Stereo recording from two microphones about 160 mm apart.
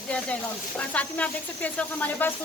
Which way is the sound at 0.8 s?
10° left (ahead or behind).